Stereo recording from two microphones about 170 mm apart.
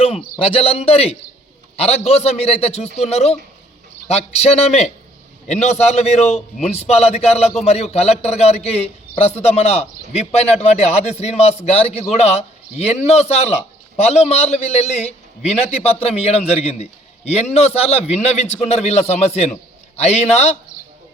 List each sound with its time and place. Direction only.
0.0 s a man's voice: 35° left (ahead or behind)